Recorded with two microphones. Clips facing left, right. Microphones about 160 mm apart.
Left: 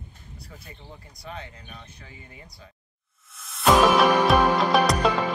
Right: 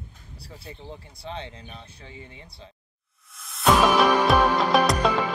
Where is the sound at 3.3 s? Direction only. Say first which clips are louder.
Left 1 dB; centre (ahead or behind).